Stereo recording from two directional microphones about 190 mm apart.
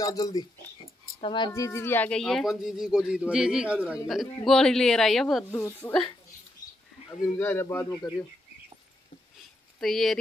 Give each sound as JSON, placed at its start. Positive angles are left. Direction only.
{"t": 0.0, "sound": "speech", "side_deg": 20}
{"t": 1.5, "sound": "a man's voice", "side_deg": 15}
{"t": 5.6, "sound": "speech", "side_deg": 15}
{"t": 7.3, "sound": "speech", "side_deg": 10}
{"t": 9.8, "sound": "speech", "side_deg": 0}